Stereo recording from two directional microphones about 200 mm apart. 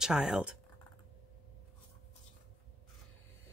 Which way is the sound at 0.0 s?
5° right (ahead or behind).